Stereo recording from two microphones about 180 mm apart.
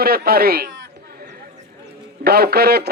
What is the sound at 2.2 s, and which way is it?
Speech, 60° right (ahead or behind).